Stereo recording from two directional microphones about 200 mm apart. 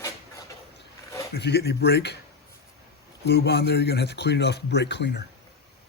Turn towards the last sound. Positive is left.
turn(degrees=60)  # may be behind; listen again after turning